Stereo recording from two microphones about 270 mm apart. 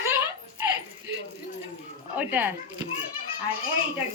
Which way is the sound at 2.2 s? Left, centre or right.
Centre.